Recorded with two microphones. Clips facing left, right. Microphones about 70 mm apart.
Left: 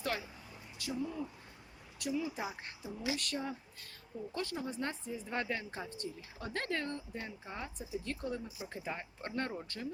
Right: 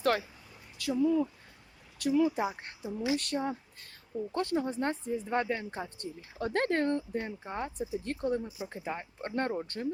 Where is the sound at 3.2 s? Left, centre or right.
Right.